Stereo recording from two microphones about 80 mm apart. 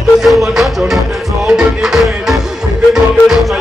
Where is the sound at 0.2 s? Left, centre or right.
Centre.